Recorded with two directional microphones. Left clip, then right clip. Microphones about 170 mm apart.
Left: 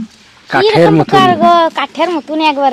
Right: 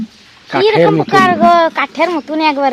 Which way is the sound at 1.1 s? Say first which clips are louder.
Right 1 dB; 15° left (ahead or behind).